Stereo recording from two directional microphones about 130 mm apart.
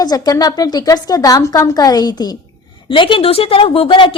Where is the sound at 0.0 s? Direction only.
30° left (ahead or behind).